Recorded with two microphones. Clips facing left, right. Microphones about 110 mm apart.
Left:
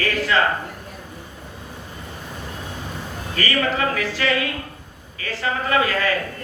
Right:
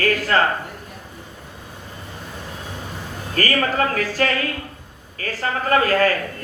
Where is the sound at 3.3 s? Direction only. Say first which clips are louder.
Right 2 dB; 45° right (ahead or behind).